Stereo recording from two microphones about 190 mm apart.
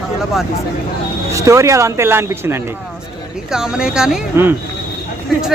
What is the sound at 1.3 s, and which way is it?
Speech, 15° right (ahead or behind).